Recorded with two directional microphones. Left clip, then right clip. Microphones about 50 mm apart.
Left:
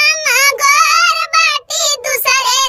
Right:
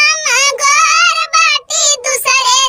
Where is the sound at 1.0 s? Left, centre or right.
Left.